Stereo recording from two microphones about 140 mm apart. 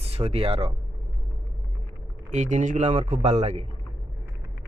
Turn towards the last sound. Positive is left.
turn(degrees=-55)  # may be behind; listen again after turning